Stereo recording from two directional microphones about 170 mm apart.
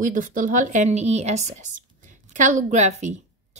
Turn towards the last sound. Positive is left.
turn(degrees=-45)  # may be behind; listen again after turning